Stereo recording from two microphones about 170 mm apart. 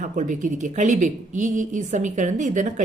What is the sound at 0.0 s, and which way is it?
A woman's voice, 50° right (ahead or behind).